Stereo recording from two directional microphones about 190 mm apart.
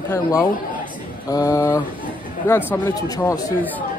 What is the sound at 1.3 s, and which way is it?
Speech, 20° left (ahead or behind).